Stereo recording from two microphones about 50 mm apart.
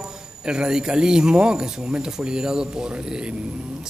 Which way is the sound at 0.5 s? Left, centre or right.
Centre.